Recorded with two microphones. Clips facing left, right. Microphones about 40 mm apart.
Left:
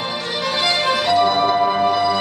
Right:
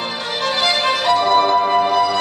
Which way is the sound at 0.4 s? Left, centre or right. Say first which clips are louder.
Right 2 dB; right.